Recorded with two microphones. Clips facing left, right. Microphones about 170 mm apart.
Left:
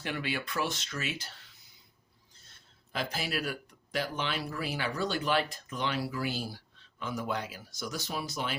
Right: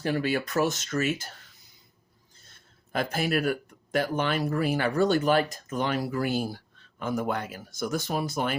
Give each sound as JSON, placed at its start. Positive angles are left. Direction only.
{"t": 0.0, "sound": "speech", "side_deg": -40}
{"t": 2.5, "sound": "speech", "side_deg": -50}